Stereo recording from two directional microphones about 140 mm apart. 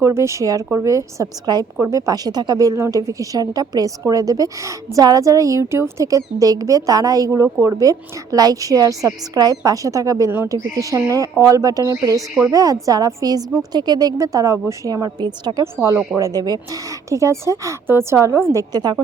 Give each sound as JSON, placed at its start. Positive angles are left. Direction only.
{"t": 0.0, "sound": "a woman's voice", "side_deg": -20}